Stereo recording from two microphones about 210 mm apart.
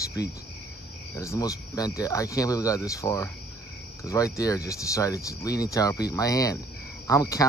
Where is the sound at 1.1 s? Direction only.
15° left (ahead or behind).